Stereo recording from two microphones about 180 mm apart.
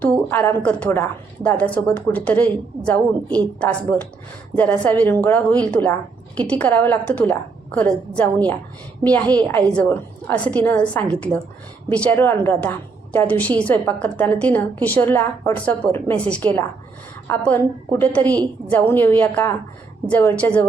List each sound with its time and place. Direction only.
0.0 s a woman's voice: 10° left (ahead or behind)